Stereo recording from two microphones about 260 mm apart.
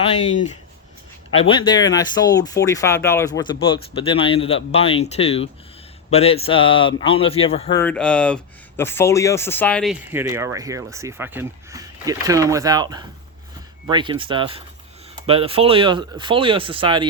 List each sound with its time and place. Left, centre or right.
1.3 s speech: left
7.8 s speech: centre